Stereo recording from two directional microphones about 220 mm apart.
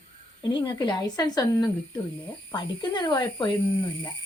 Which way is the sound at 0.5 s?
20° left (ahead or behind).